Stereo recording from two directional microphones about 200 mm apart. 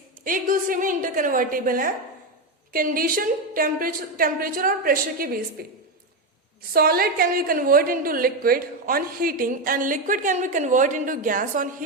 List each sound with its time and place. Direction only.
0.3 s a woman's voice: 45° right (ahead or behind)
6.7 s a woman's voice: 50° right (ahead or behind)